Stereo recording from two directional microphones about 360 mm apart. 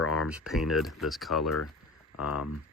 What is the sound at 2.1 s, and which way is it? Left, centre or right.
Speech, left.